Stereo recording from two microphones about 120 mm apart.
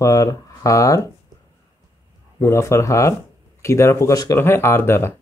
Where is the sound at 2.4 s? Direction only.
25° left (ahead or behind).